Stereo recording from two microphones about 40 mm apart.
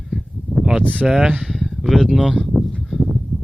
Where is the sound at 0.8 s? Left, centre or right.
Left.